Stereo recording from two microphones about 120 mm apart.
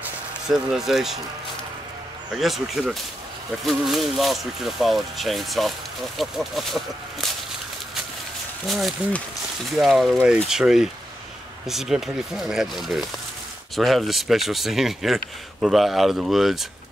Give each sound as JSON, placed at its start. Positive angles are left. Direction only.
{"t": 0.5, "sound": "speech", "side_deg": -5}
{"t": 2.3, "sound": "speech", "side_deg": 0}
{"t": 8.6, "sound": "speech", "side_deg": 0}